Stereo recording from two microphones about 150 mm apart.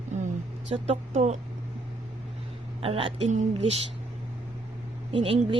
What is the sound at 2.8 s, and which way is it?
Speech, 40° right (ahead or behind).